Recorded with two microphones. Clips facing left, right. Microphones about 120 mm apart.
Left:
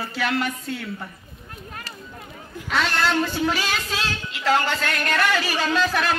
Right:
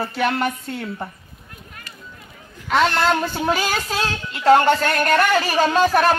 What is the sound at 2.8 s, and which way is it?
Music, 35° right (ahead or behind).